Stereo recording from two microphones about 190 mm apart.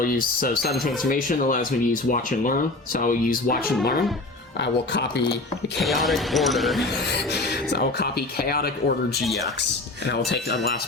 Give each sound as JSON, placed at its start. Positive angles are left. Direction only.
{"t": 0.0, "sound": "speech", "side_deg": 50}
{"t": 6.1, "sound": "speech", "side_deg": 0}
{"t": 7.1, "sound": "speech", "side_deg": 60}
{"t": 10.1, "sound": "speech", "side_deg": 65}